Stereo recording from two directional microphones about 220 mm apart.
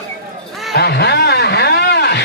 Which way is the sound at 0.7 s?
50° left (ahead or behind).